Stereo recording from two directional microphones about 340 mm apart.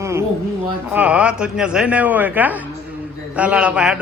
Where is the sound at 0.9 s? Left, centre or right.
Centre.